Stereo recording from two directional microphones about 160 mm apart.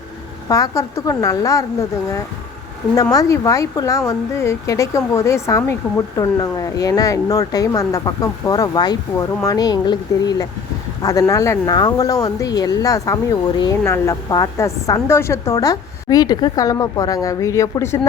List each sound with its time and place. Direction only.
0.4 s a woman's voice: 20° left (ahead or behind)
2.9 s a woman's voice: 20° left (ahead or behind)